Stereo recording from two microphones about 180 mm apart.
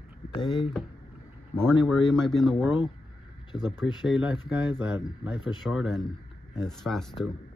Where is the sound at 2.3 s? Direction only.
Centre (ahead or behind).